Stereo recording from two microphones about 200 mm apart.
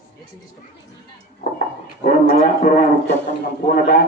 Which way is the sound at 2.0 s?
40° left (ahead or behind).